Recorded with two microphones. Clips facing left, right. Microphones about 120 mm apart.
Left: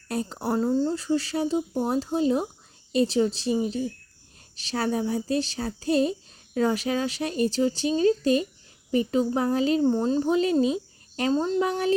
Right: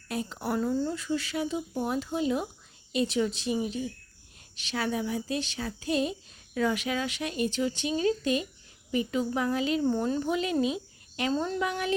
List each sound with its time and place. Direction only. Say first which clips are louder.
0.1 s speech: left 4 dB; 35° left (ahead or behind)